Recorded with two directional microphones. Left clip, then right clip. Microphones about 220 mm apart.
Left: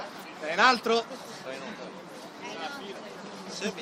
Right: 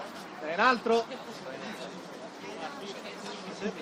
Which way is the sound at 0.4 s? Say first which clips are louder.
Left 3 dB; 35° left (ahead or behind).